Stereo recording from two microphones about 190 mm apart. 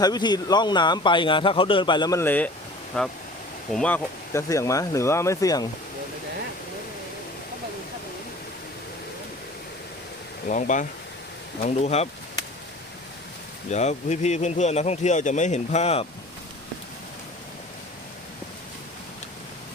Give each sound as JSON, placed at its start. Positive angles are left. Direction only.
{"t": 0.0, "sound": "speech", "side_deg": 20}
{"t": 10.4, "sound": "speech", "side_deg": 40}
{"t": 13.7, "sound": "speech", "side_deg": 35}